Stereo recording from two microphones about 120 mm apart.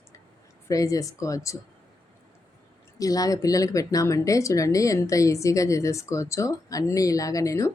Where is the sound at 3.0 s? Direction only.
30° left (ahead or behind).